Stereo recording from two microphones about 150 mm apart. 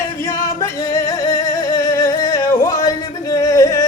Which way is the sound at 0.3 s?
25° left (ahead or behind).